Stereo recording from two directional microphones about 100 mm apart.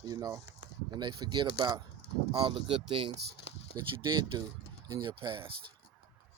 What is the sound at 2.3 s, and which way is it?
Speech, 60° right (ahead or behind).